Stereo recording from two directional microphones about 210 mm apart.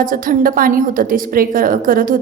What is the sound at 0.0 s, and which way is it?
A woman's voice, 40° right (ahead or behind).